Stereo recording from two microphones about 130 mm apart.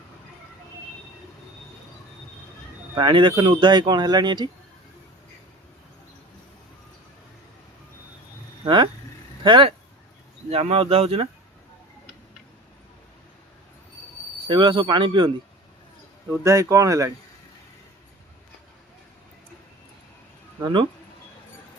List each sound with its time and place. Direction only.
3.0 s speech: 35° right (ahead or behind)
8.6 s speech: 40° right (ahead or behind)
10.5 s speech: 50° right (ahead or behind)
14.4 s speech: 40° right (ahead or behind)
16.3 s speech: 20° right (ahead or behind)